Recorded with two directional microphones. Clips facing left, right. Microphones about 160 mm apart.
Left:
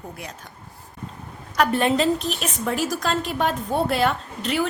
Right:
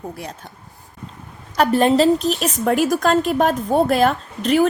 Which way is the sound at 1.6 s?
35° right (ahead or behind).